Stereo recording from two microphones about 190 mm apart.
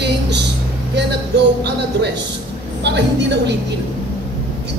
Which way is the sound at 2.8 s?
65° right (ahead or behind).